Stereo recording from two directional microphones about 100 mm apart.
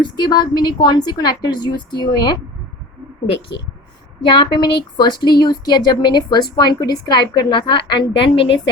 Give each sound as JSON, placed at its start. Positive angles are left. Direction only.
{"t": 0.0, "sound": "speech", "side_deg": 45}
{"t": 4.3, "sound": "speech", "side_deg": 55}